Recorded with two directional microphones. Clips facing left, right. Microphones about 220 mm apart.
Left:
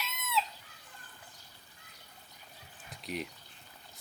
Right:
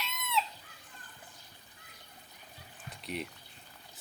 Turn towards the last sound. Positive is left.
turn(degrees=0)  # may be behind; listen again after turning